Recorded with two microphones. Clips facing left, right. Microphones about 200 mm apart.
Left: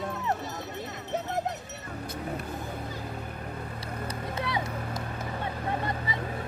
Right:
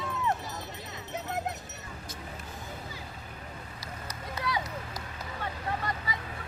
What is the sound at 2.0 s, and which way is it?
Vehicle, 60° left (ahead or behind).